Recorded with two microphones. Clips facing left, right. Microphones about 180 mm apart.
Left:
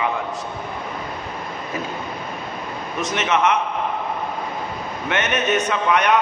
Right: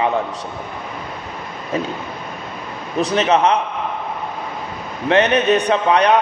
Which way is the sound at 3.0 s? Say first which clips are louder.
Right 5 dB; 35° right (ahead or behind).